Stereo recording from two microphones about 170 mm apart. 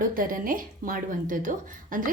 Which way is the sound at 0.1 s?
55° right (ahead or behind).